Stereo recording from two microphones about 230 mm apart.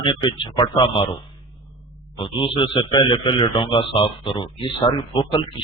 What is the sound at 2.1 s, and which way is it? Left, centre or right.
Speech, left.